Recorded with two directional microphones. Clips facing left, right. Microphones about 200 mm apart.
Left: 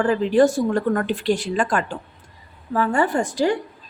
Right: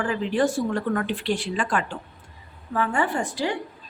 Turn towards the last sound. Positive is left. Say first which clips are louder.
# left 6 dB
turn(degrees=45)  # may be behind; listen again after turning